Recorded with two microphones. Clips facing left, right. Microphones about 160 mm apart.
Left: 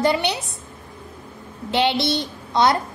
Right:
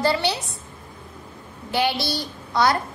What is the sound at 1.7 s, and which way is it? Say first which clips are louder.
A child's voice: left 3 dB; 25° left (ahead or behind).